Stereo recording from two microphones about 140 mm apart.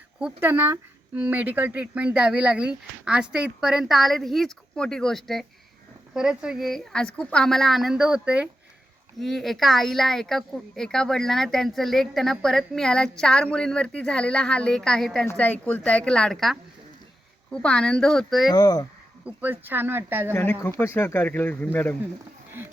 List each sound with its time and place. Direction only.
0.2 s speech: 10° right (ahead or behind)
18.5 s speech: 25° left (ahead or behind)
19.2 s speech: 15° right (ahead or behind)
20.3 s speech: 15° left (ahead or behind)